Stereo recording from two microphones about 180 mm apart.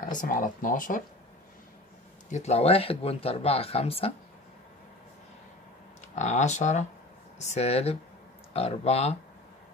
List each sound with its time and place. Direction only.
0.0 s speech: 45° left (ahead or behind)
2.2 s speech: 40° left (ahead or behind)
6.1 s speech: 40° left (ahead or behind)